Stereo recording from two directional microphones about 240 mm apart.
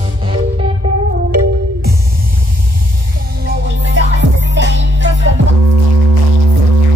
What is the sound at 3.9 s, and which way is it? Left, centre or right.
Music, right.